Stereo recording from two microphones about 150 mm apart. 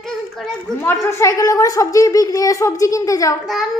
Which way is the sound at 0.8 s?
15° left (ahead or behind).